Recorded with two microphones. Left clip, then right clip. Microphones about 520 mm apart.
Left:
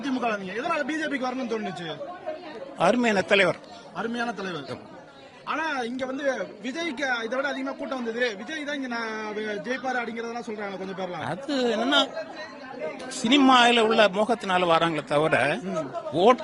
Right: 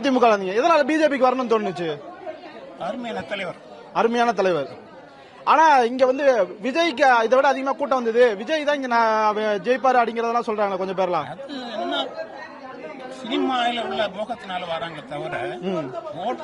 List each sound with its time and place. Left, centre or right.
0.2 s speech: centre
5.5 s a woman's voice: right
5.8 s speech: centre
13.3 s speech: centre